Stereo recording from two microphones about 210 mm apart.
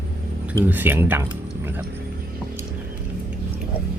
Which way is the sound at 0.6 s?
10° right (ahead or behind).